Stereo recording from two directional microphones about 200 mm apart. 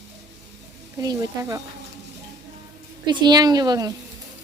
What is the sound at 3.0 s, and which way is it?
Speech, 20° right (ahead or behind).